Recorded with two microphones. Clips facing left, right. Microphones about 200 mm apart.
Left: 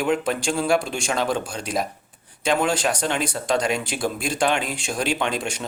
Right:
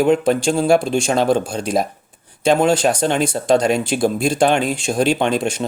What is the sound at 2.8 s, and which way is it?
Speech, 40° right (ahead or behind).